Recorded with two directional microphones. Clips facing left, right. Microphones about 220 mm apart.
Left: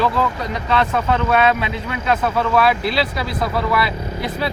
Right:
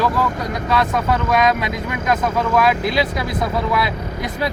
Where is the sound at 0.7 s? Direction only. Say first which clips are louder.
Left 1 dB; 10° right (ahead or behind).